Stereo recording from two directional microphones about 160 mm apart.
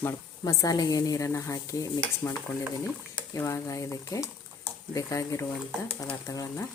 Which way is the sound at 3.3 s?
20° left (ahead or behind).